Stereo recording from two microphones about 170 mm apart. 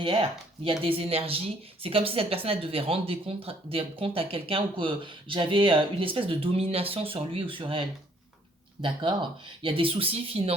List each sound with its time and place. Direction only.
0.0 s speech: 30° right (ahead or behind)